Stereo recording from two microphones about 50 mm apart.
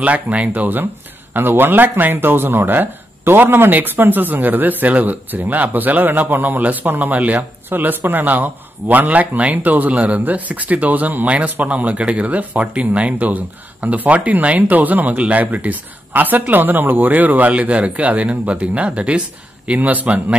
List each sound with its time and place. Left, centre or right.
0.0 s speech: right